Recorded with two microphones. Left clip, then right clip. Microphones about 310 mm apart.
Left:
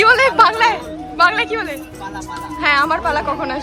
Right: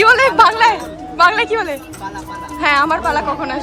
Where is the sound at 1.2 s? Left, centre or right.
Centre.